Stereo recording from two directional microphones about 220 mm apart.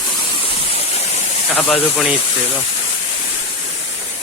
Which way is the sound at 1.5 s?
5° left (ahead or behind).